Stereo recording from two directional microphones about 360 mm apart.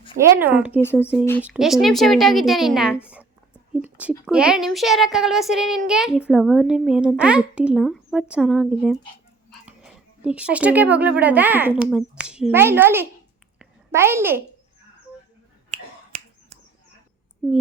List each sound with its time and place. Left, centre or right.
0.1 s a woman's voice: centre
13.6 s a sound: centre
15.7 s finger snapping: centre